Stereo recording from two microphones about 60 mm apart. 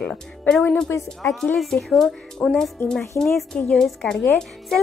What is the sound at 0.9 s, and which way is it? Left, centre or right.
Speech, left.